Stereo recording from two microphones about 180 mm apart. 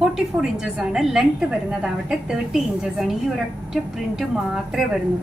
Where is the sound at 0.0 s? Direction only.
5° right (ahead or behind).